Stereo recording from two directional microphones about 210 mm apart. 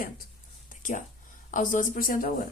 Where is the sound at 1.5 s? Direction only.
40° left (ahead or behind).